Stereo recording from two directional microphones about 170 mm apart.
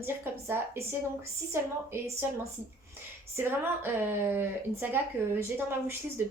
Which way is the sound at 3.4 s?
10° right (ahead or behind).